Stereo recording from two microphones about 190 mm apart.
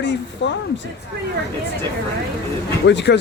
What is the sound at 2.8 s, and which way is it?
Speech, 65° left (ahead or behind).